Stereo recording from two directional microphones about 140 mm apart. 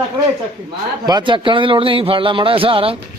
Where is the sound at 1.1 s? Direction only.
35° right (ahead or behind).